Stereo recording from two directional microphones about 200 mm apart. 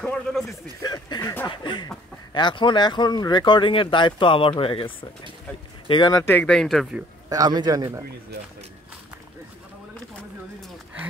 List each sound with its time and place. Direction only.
0.0 s a man's voice: centre (ahead or behind)
0.7 s speech: 20° left (ahead or behind); by 7.0 s centre (ahead or behind)
7.2 s a man's voice: 20° right (ahead or behind)